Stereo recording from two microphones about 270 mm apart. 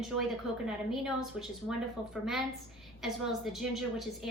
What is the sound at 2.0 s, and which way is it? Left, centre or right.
Speech, centre.